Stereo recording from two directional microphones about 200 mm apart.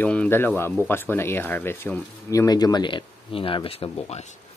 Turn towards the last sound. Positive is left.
turn(degrees=30)  # may be behind; listen again after turning